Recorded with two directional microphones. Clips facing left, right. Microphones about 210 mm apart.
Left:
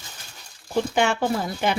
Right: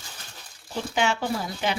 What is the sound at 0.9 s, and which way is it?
Speech, 50° left (ahead or behind).